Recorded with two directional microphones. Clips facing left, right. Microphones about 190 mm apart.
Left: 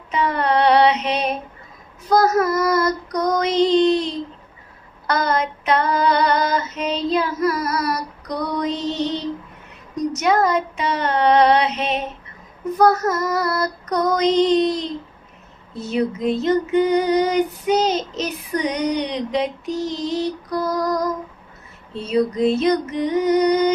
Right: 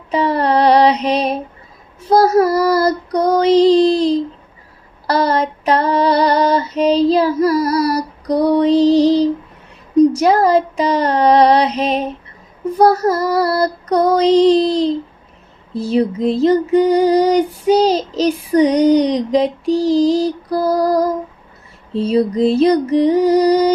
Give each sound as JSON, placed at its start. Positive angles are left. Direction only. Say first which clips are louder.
{"t": 0.1, "sound": "female singing", "louder": "right 5 dB", "side_deg": -35}